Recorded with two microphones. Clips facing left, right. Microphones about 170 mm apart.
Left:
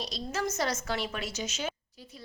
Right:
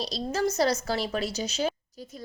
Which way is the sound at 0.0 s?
35° right (ahead or behind).